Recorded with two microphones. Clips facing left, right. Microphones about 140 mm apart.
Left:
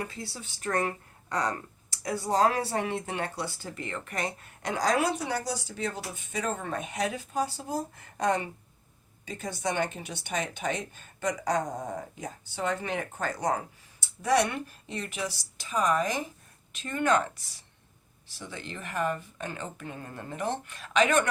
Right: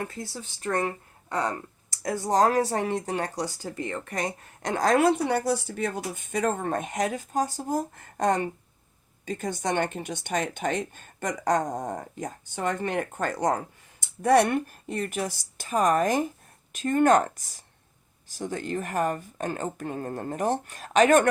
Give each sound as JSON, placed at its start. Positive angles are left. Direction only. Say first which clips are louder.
{"t": 0.8, "sound": "speech", "louder": "right 1 dB", "side_deg": -25}
{"t": 2.0, "sound": "speech", "louder": "right 3 dB", "side_deg": -45}